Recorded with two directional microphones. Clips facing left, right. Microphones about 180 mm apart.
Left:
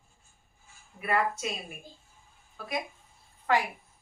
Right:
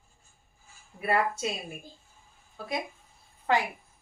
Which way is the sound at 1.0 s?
30° right (ahead or behind).